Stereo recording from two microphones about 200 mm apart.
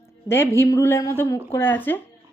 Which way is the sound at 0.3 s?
10° left (ahead or behind).